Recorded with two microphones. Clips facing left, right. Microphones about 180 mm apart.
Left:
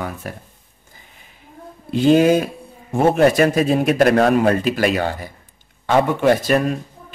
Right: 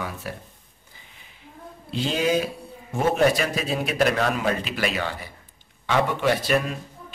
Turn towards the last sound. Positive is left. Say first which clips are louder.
# left 9 dB
turn(degrees=45)  # may be behind; listen again after turning